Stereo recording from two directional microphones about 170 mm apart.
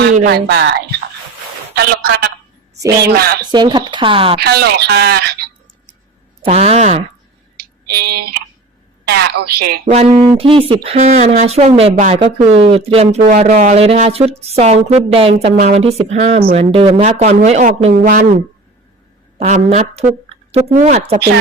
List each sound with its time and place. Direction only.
0.3 s speech: 80° right
1.7 s a woman's voice: 65° right (ahead or behind)
3.5 s speech: 25° right (ahead or behind)
4.4 s speech: 70° right (ahead or behind)
6.4 s a woman's voice: 35° right (ahead or behind)
8.1 s speech: 70° right (ahead or behind)
9.9 s a woman's voice: 35° right (ahead or behind); by 18.3 s 55° right (ahead or behind)
19.4 s a woman's voice: 40° right (ahead or behind)